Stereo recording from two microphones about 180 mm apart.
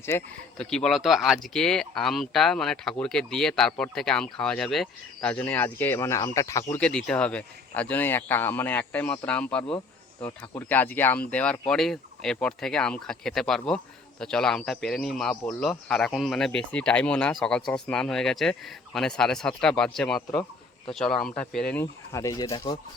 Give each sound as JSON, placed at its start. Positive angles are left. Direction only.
{"t": 0.1, "sound": "speech", "side_deg": 15}
{"t": 0.6, "sound": "speech", "side_deg": 5}
{"t": 6.7, "sound": "speech", "side_deg": 5}
{"t": 9.6, "sound": "insect", "side_deg": 30}
{"t": 10.2, "sound": "speech", "side_deg": 10}
{"t": 22.1, "sound": "speech", "side_deg": 20}